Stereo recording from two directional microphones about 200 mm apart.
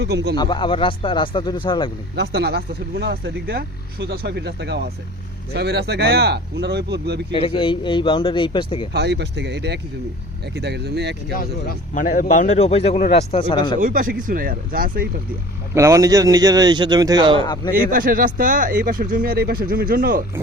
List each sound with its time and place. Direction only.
0.0 s speech: 55° right (ahead or behind)
0.3 s speech: 25° left (ahead or behind)
2.1 s speech: 55° right (ahead or behind)
7.3 s speech: 25° left (ahead or behind)
8.9 s speech: 55° right (ahead or behind)
11.3 s a man's voice: 45° left (ahead or behind); by 13.7 s 25° left (ahead or behind)
13.7 s speech: 40° right (ahead or behind)
15.7 s a man's voice: 15° right (ahead or behind)
17.8 s speech: 45° right (ahead or behind)